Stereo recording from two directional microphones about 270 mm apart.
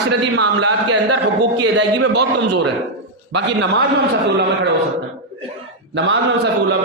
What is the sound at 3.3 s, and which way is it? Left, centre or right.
Speech, right.